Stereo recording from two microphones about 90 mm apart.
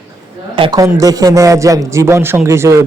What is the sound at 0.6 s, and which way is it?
Speech, 75° right (ahead or behind).